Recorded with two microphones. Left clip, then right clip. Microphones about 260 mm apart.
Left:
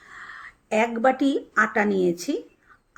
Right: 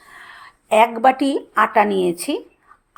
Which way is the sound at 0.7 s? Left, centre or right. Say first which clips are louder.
Right 7 dB; right.